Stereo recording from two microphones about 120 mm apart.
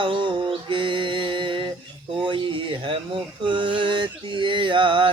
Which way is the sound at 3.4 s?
40° right (ahead or behind).